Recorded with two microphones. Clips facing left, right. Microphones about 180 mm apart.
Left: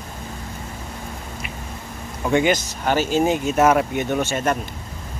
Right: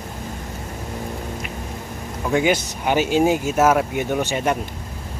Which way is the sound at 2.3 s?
5° right (ahead or behind).